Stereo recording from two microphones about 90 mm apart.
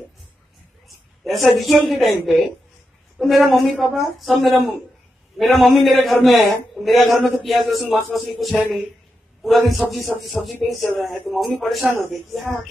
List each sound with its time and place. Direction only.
1.2 s a man's voice: centre (ahead or behind)
11.8 s speech: 20° right (ahead or behind)
12.1 s a man's voice: centre (ahead or behind)